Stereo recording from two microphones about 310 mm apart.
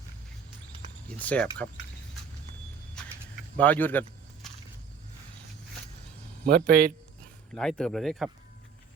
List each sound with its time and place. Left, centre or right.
1.2 s speech: centre
3.6 s speech: centre
6.4 s speech: right
7.5 s speech: centre